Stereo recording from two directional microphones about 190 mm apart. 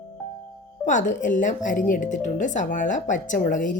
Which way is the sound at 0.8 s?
40° left (ahead or behind).